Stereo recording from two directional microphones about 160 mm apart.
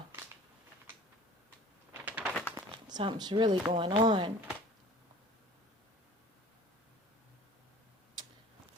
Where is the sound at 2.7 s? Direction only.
30° right (ahead or behind).